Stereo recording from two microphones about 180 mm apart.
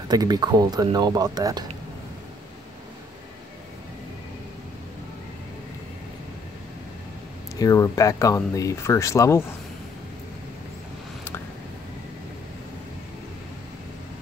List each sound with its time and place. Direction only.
0.1 s speech: 20° right (ahead or behind)
7.5 s speech: 20° left (ahead or behind)